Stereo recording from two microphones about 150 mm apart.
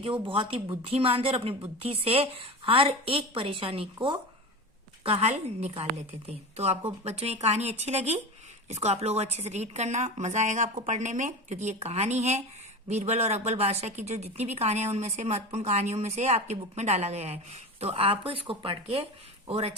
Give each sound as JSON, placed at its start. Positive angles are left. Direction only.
{"t": 0.0, "sound": "a woman's voice", "side_deg": -35}
{"t": 5.0, "sound": "a woman's voice", "side_deg": -45}